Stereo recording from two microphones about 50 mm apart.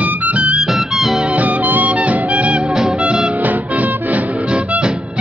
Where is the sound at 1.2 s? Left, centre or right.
Right.